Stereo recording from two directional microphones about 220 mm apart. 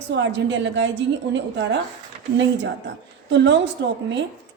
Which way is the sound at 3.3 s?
55° right (ahead or behind).